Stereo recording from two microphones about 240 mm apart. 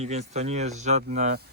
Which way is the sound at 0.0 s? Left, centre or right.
Right.